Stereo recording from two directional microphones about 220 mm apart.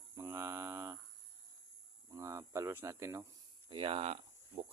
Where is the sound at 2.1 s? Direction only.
15° right (ahead or behind).